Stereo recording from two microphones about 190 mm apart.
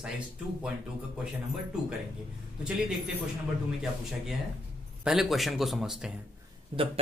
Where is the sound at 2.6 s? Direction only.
5° right (ahead or behind).